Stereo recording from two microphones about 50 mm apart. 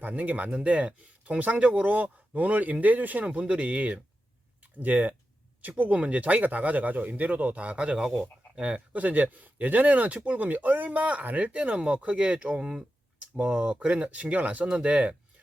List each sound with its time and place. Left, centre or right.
0.0 s speech: right